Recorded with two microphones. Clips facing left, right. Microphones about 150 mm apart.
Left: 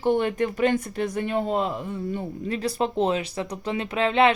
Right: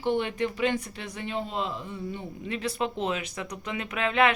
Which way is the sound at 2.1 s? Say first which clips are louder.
Left 5 dB; 40° left (ahead or behind).